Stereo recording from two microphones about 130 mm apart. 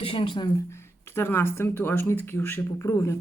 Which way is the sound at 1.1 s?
20° left (ahead or behind).